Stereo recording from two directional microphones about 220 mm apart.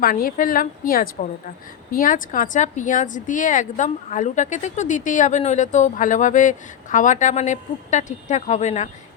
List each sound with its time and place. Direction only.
0.0 s speech: 40° left (ahead or behind)